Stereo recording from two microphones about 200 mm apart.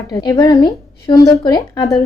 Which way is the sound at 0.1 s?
20° left (ahead or behind).